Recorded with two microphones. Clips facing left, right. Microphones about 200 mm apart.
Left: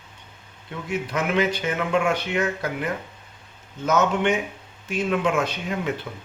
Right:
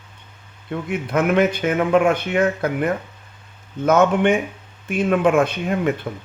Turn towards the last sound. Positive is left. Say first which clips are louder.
# right 6 dB
turn(degrees=-55)  # may be behind; listen again after turning